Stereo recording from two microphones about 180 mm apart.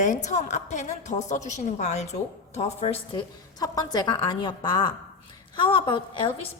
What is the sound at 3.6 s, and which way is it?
A woman's voice, 20° left (ahead or behind).